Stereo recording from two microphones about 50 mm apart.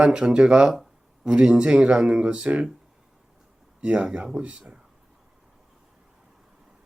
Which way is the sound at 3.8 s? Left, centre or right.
Right.